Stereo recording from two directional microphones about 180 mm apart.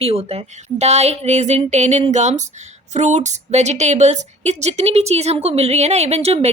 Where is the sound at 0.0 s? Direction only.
35° right (ahead or behind).